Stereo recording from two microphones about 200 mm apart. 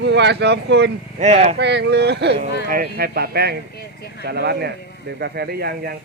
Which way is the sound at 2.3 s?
40° right (ahead or behind).